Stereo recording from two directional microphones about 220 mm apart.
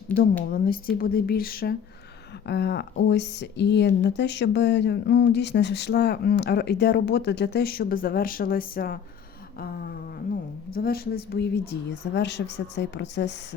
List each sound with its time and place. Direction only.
0.5 s speech: 40° left (ahead or behind)